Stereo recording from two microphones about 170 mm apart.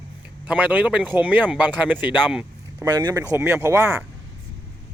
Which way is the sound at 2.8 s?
25° right (ahead or behind).